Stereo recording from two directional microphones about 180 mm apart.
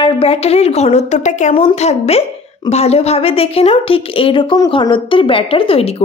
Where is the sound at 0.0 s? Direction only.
30° left (ahead or behind).